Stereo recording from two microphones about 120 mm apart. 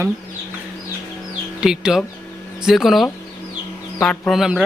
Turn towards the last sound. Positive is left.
turn(degrees=-5)  # may be behind; listen again after turning